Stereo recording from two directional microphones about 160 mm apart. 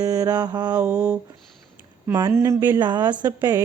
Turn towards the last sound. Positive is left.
turn(degrees=-25)  # may be behind; listen again after turning